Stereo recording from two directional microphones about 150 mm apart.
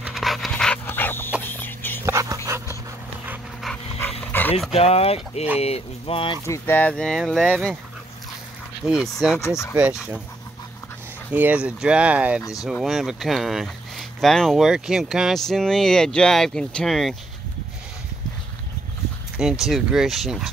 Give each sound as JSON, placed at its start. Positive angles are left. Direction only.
{"t": 0.0, "sound": "dog", "side_deg": 0}
{"t": 1.4, "sound": "a sound", "side_deg": 15}
{"t": 2.0, "sound": "dog", "side_deg": -20}
{"t": 3.7, "sound": "dog", "side_deg": 0}
{"t": 4.2, "sound": "dog", "side_deg": 10}
{"t": 4.7, "sound": "speech", "side_deg": 40}
{"t": 6.4, "sound": "speech", "side_deg": 15}
{"t": 8.8, "sound": "speech", "side_deg": -5}
{"t": 11.3, "sound": "speech", "side_deg": -10}
{"t": 19.6, "sound": "speech", "side_deg": -5}